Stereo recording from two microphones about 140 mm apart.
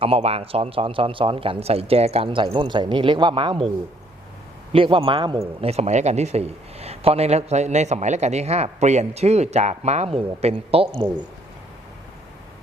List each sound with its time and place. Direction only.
0.0 s speech: 45° right (ahead or behind)
4.7 s a man's voice: 40° right (ahead or behind)